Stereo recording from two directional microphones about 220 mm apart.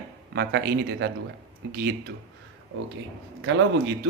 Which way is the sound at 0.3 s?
50° right (ahead or behind).